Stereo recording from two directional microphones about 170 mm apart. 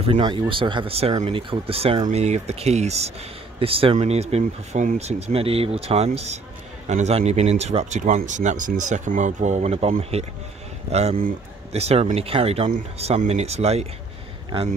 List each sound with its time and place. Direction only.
0.0 s speech: 30° right (ahead or behind)